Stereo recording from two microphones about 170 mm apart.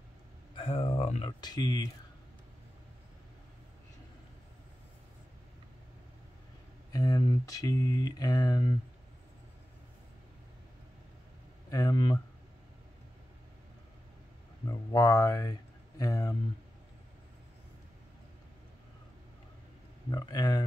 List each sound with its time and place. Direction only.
0.6 s a sound: 30° left (ahead or behind)
1.2 s speech: 25° left (ahead or behind)
6.9 s speech: 20° left (ahead or behind)
11.7 s speech: 20° left (ahead or behind)
14.7 s speech: 20° left (ahead or behind)
20.1 s speech: 25° left (ahead or behind)